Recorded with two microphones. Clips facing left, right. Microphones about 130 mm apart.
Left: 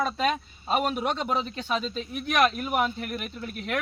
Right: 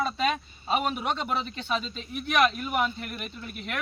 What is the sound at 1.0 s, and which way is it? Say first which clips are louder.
Speech: left 2 dB; 40° left (ahead or behind).